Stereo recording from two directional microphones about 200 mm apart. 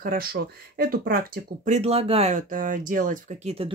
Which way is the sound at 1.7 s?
30° right (ahead or behind).